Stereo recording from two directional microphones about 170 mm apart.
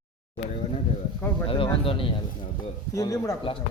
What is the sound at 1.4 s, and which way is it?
Speech, 30° left (ahead or behind).